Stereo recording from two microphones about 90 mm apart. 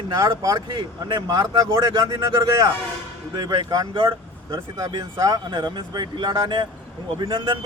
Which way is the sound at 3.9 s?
65° right (ahead or behind).